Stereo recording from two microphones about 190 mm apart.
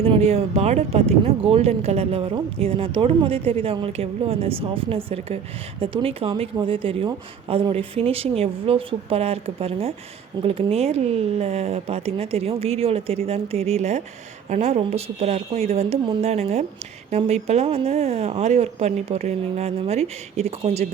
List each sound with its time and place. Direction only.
0.0 s a woman's voice: 30° right (ahead or behind)